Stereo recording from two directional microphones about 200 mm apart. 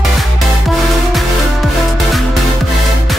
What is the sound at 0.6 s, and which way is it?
Music, centre (ahead or behind).